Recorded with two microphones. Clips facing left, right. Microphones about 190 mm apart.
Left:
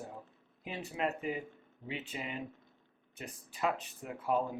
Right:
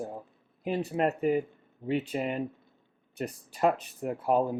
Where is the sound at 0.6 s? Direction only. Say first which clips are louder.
Right 8 dB; 45° right (ahead or behind).